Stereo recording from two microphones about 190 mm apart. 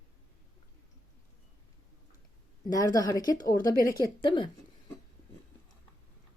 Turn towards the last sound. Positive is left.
turn(degrees=25)  # may be behind; listen again after turning